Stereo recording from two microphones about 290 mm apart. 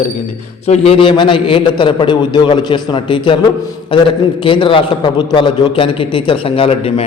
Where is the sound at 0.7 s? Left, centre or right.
Centre.